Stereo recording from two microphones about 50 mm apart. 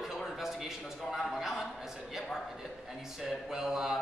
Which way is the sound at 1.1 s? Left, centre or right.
Centre.